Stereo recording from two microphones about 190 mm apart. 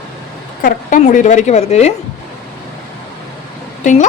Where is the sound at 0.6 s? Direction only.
45° left (ahead or behind).